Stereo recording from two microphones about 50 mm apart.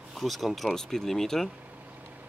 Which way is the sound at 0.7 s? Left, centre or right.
Centre.